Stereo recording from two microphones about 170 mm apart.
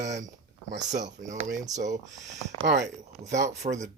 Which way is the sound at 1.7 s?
45° right (ahead or behind).